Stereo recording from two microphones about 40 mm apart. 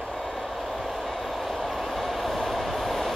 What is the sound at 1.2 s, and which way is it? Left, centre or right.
Train, centre.